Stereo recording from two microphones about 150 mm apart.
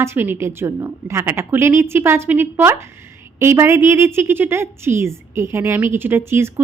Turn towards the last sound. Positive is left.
turn(degrees=-15)  # may be behind; listen again after turning